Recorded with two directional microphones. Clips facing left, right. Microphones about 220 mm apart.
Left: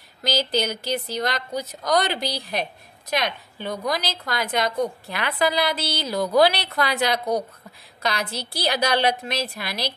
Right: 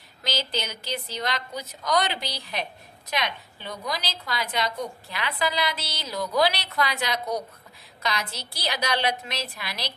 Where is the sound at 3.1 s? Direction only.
50° left (ahead or behind).